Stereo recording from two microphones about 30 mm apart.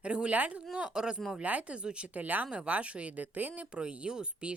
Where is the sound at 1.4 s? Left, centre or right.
Right.